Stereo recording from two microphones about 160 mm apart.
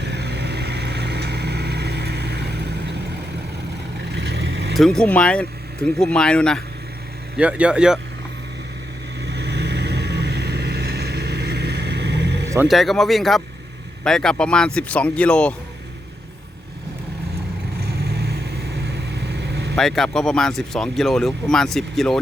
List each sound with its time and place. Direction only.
0.0 s vehicle: 90° right
4.1 s vehicle: 90° right
4.7 s speech: centre (ahead or behind)
7.3 s speech: 10° right (ahead or behind)
9.2 s vehicle: 90° right
12.6 s speech: centre (ahead or behind)
17.7 s vehicle: 85° right
19.7 s speech: 5° left (ahead or behind)